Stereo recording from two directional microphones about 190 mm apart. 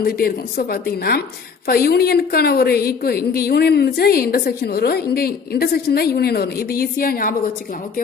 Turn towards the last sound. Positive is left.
turn(degrees=50)  # may be behind; listen again after turning